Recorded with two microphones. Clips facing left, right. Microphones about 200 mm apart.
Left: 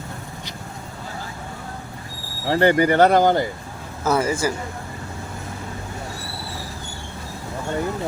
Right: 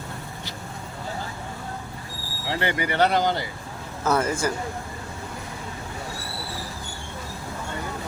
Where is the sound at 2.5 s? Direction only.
45° left (ahead or behind).